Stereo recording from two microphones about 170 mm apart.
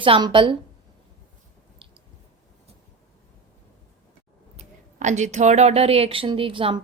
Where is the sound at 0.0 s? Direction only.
30° right (ahead or behind).